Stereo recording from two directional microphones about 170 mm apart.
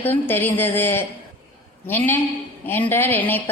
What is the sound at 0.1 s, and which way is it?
Speech, 10° left (ahead or behind).